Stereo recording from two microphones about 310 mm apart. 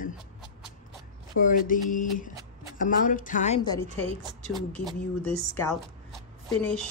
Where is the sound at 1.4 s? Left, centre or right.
Left; by 6.2 s centre.